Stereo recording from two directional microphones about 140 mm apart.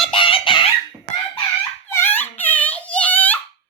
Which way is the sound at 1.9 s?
15° left (ahead or behind).